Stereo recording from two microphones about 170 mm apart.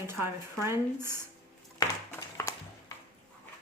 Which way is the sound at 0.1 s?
15° right (ahead or behind).